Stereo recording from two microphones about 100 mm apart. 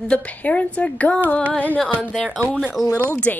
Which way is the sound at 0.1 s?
15° left (ahead or behind).